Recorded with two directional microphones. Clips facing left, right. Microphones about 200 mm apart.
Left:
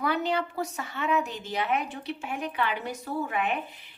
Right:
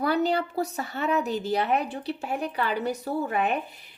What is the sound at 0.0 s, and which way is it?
A woman's voice, 35° right (ahead or behind).